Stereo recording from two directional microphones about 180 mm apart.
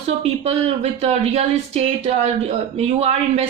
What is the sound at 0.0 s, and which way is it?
Speech, 35° right (ahead or behind).